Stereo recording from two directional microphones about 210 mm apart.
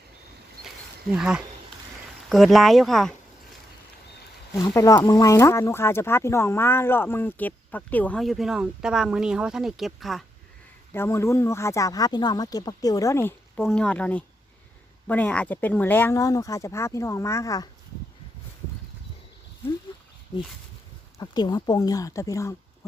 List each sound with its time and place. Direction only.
1.1 s speech: 5° right (ahead or behind)
4.5 s speech: 15° left (ahead or behind)
10.9 s speech: 10° left (ahead or behind)
21.2 s speech: 20° left (ahead or behind)